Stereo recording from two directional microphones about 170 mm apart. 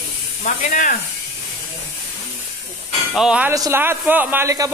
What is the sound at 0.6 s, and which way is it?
Speech, 50° left (ahead or behind).